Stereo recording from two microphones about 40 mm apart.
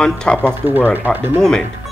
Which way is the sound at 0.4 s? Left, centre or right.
Right.